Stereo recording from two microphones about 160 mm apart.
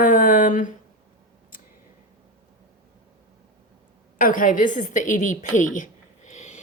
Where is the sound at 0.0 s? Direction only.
55° left (ahead or behind).